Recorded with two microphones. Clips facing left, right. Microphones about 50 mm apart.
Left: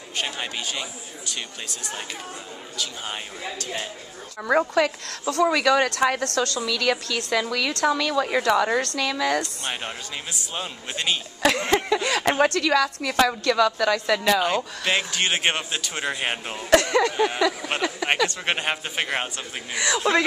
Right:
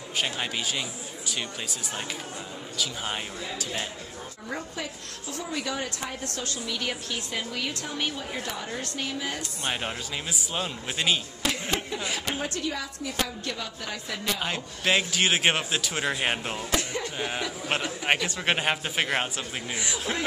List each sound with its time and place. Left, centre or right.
0.2 s speech: centre
2.8 s speech: centre
4.5 s a woman's voice: left
10.5 s speech: centre
11.4 s a woman's voice: left
14.4 s speech: centre
16.7 s speech: left
17.4 s a woman's voice: left
18.3 s speech: centre
19.7 s speech: left